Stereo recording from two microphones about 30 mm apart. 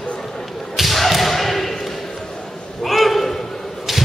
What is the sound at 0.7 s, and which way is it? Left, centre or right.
Thump, centre.